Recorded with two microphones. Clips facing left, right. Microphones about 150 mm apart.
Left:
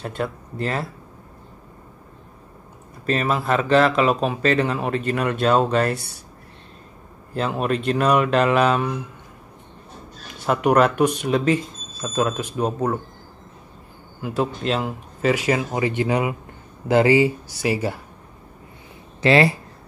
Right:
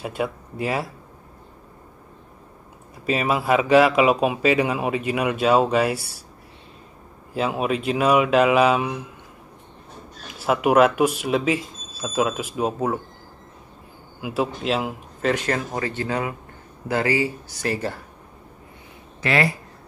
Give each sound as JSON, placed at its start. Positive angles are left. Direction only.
{"t": 0.0, "sound": "a man's voice", "side_deg": -10}
{"t": 3.1, "sound": "a man's voice", "side_deg": -10}
{"t": 7.3, "sound": "speech", "side_deg": -5}
{"t": 10.4, "sound": "speech", "side_deg": -5}
{"t": 14.2, "sound": "speech", "side_deg": -5}
{"t": 15.3, "sound": "speech", "side_deg": 10}
{"t": 17.6, "sound": "speech", "side_deg": 10}
{"t": 19.2, "sound": "speech", "side_deg": 30}